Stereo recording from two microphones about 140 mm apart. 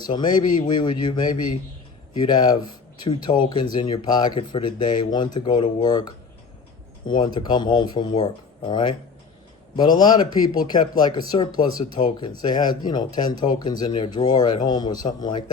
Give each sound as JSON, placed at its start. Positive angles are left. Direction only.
{"t": 0.1, "sound": "speech", "side_deg": 30}
{"t": 7.1, "sound": "speech", "side_deg": 35}